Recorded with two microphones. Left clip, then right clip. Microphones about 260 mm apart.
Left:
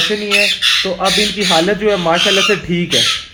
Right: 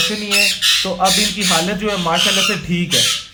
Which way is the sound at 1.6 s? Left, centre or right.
Centre.